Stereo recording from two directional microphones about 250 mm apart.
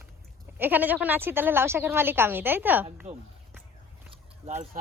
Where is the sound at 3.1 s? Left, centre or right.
Right.